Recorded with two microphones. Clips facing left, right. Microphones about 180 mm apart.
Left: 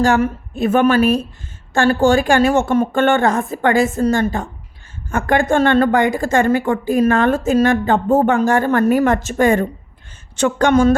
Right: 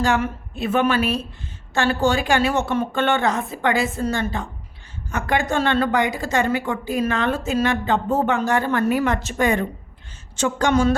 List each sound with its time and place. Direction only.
0.0 s a woman's voice: 45° left (ahead or behind)
10.3 s a woman's voice: 60° left (ahead or behind)